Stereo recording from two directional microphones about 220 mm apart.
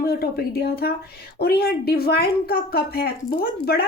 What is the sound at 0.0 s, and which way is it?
Speech, 45° left (ahead or behind).